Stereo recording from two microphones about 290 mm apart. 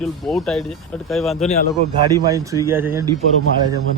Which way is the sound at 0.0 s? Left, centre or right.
Centre.